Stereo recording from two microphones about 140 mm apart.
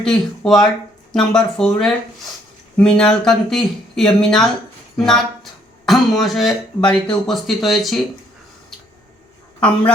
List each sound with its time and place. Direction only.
0.0 s speech: 5° left (ahead or behind)
2.7 s speech: 5° left (ahead or behind)
9.6 s a man's voice: 10° left (ahead or behind)